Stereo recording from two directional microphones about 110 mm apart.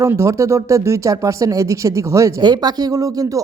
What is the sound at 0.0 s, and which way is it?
Speech, 25° right (ahead or behind).